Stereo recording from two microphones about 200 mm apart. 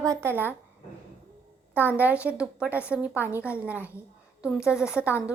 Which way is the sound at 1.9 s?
5° right (ahead or behind).